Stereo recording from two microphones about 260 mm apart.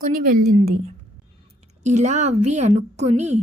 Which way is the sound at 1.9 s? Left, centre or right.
Right.